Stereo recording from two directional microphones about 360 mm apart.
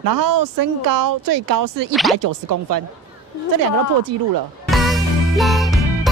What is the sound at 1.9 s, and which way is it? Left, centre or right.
Speech, centre.